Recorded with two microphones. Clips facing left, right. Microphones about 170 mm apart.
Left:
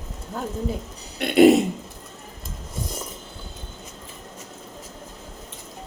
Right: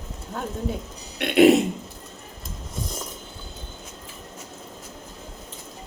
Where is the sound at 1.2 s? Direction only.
Centre (ahead or behind).